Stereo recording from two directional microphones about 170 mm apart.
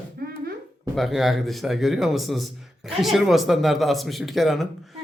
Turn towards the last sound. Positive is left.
turn(degrees=0)  # may be behind; listen again after turning